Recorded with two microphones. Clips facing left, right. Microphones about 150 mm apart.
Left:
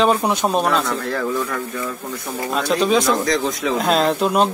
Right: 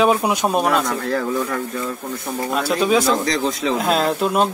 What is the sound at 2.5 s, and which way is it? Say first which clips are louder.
Speech: even; 5° right (ahead or behind).